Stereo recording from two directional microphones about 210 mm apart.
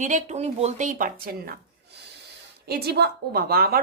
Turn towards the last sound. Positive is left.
turn(degrees=-45)  # may be behind; listen again after turning